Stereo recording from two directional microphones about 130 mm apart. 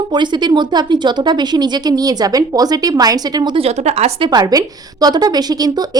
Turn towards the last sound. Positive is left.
turn(degrees=-30)  # may be behind; listen again after turning